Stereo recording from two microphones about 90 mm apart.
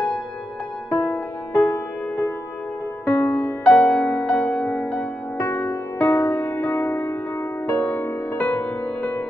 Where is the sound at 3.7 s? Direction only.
10° left (ahead or behind).